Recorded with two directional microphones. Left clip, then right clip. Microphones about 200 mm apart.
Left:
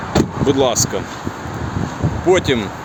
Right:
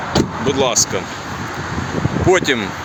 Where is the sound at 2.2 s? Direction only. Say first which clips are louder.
Even; centre (ahead or behind).